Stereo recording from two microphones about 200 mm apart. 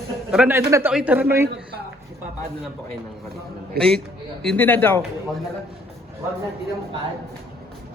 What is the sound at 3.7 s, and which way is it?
Speech, 50° right (ahead or behind).